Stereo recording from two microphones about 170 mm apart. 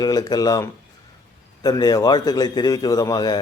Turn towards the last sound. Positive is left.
turn(degrees=25)  # may be behind; listen again after turning